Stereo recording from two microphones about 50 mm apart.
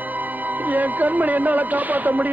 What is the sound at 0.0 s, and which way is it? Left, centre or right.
A man's voice, right.